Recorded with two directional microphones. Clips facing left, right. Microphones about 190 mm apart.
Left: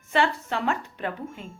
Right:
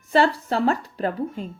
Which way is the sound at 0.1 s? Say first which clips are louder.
Right 5 dB; 35° right (ahead or behind).